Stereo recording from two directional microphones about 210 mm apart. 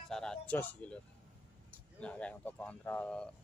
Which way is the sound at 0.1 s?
5° left (ahead or behind).